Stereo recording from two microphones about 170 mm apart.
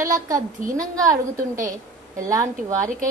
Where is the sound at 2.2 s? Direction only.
20° right (ahead or behind).